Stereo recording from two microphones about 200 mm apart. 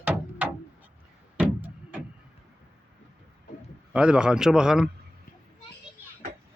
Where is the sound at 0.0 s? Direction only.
10° right (ahead or behind).